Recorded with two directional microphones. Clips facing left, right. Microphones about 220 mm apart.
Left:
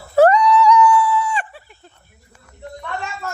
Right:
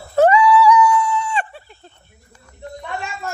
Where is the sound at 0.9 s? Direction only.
25° right (ahead or behind).